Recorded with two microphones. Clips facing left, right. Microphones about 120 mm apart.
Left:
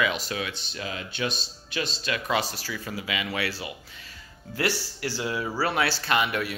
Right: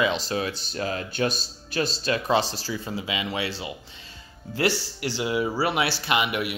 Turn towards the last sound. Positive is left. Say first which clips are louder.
# right 1 dB
turn(degrees=-15)  # may be behind; listen again after turning